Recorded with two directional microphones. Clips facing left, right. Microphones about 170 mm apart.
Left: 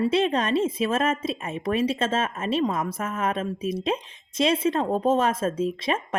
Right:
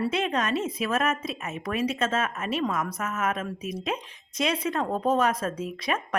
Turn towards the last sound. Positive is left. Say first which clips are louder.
# left 3 dB
turn(degrees=25)  # may be behind; listen again after turning